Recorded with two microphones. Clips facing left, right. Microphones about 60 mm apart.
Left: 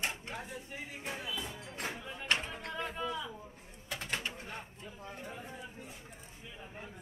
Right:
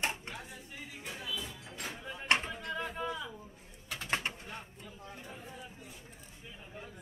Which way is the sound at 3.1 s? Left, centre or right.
Right.